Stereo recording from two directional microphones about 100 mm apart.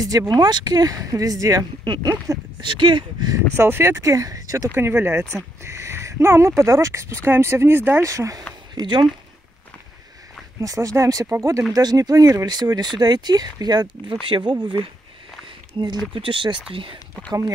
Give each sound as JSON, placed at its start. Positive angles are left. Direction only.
{"t": 0.3, "sound": "speech", "side_deg": -45}
{"t": 2.7, "sound": "speech", "side_deg": -55}
{"t": 3.3, "sound": "speech", "side_deg": -25}
{"t": 4.7, "sound": "speech", "side_deg": -25}
{"t": 8.0, "sound": "speech", "side_deg": -30}
{"t": 8.7, "sound": "speech", "side_deg": -50}
{"t": 10.6, "sound": "speech", "side_deg": -35}